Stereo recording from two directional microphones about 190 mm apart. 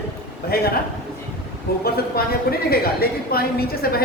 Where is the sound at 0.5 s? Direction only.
55° left (ahead or behind).